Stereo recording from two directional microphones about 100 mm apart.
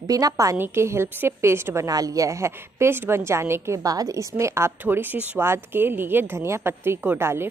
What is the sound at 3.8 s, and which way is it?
A woman's voice, 40° right (ahead or behind).